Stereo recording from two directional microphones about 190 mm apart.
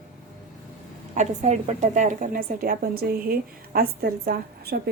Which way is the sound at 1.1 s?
40° right (ahead or behind).